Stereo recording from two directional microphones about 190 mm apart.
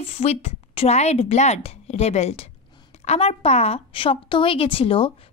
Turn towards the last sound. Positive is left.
turn(degrees=30)  # may be behind; listen again after turning